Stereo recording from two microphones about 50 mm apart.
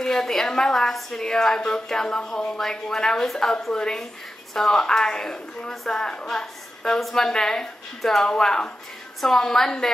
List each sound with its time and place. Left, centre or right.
0.0 s a woman's voice: centre